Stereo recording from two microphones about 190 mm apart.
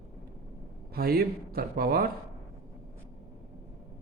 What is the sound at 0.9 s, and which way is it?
A man's voice, 55° right (ahead or behind).